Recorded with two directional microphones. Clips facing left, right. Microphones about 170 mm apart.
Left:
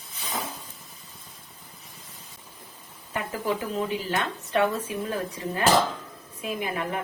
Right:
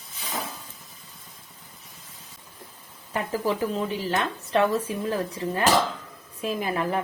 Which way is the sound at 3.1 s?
35° right (ahead or behind).